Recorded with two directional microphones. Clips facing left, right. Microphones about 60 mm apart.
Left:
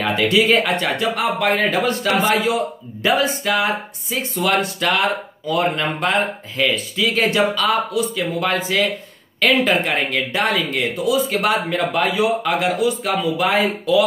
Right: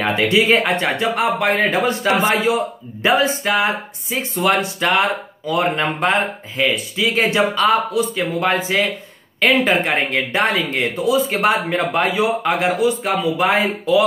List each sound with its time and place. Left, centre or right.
0.0 s speech: right